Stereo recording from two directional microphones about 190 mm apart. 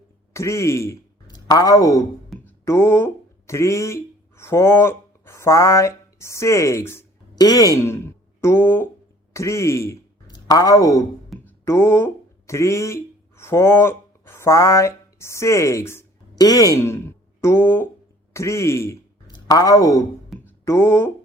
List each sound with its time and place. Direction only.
0.3 s speech: 15° left (ahead or behind)
2.3 s music: centre (ahead or behind)
2.6 s speech: 15° left (ahead or behind)
20.4 s music: 15° left (ahead or behind)